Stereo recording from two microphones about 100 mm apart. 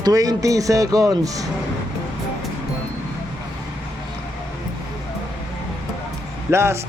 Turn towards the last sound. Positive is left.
turn(degrees=-25)  # may be behind; listen again after turning